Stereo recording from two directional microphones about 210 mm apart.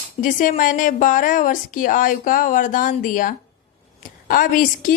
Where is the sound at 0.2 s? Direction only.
40° left (ahead or behind).